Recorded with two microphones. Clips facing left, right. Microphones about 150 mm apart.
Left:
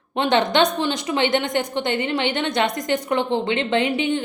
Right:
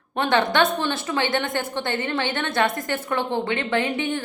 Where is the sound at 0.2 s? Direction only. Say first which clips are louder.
Left 2 dB; 20° left (ahead or behind).